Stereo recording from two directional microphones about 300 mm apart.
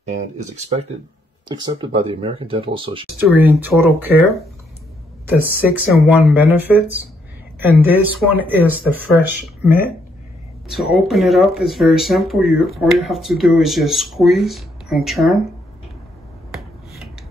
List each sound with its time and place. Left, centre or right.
1.5 s speech: centre
3.2 s speech: centre